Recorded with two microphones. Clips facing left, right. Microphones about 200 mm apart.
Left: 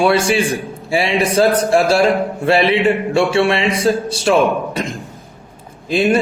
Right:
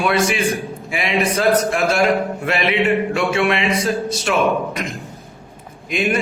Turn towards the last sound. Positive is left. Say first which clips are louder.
# left 5 dB
turn(degrees=30)  # may be behind; listen again after turning